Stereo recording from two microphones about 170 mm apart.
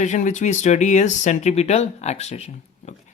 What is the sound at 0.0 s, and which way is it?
Speech, 45° left (ahead or behind).